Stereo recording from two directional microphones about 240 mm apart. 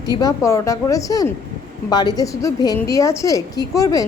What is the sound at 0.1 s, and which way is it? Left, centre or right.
A woman's voice, centre.